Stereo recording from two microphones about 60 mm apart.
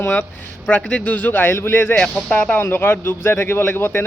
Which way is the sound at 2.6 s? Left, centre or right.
Left.